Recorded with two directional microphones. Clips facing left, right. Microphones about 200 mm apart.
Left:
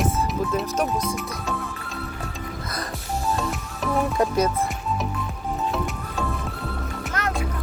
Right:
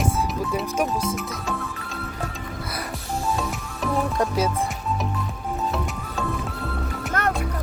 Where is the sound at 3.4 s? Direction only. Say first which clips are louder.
Even; centre (ahead or behind).